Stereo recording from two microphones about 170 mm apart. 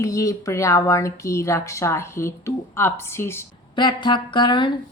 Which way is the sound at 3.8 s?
25° left (ahead or behind).